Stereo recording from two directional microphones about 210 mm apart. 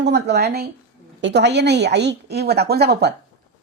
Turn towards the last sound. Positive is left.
turn(degrees=-50)  # may be behind; listen again after turning